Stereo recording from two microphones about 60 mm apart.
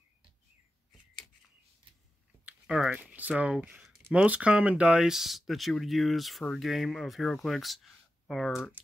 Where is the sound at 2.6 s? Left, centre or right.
Centre.